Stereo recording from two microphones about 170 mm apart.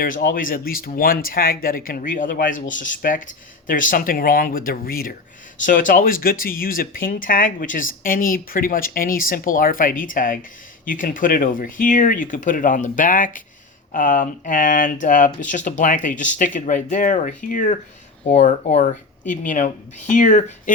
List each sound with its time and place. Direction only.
0.0 s speech: 60° left (ahead or behind)